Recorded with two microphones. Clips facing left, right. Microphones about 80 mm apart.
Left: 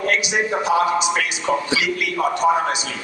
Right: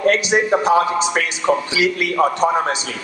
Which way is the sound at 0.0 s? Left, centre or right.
Right.